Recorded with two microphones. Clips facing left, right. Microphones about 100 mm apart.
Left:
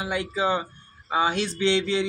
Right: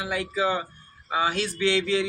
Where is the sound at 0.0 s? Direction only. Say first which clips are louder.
Even; 25° left (ahead or behind).